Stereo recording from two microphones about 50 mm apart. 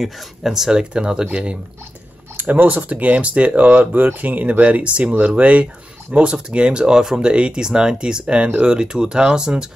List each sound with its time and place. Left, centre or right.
0.0 s speech: centre; by 1.6 s right
2.3 s speech: right; by 9.7 s centre